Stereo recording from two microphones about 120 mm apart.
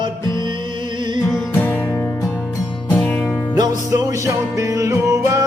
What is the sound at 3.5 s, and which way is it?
Music, 30° right (ahead or behind).